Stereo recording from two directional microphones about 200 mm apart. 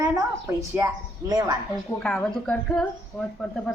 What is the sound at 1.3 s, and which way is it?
Speech, 20° right (ahead or behind).